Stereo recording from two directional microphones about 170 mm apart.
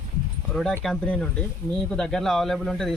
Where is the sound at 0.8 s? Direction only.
5° left (ahead or behind).